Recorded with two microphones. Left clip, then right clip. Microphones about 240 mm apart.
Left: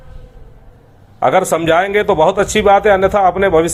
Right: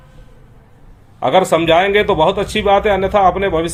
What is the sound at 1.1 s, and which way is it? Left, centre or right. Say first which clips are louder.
A man's voice: even; centre.